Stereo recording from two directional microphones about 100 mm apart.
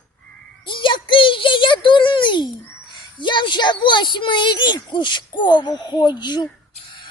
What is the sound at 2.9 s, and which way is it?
A woman's voice, 50° left (ahead or behind).